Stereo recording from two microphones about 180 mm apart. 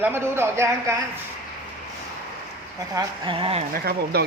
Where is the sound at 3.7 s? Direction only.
60° right (ahead or behind).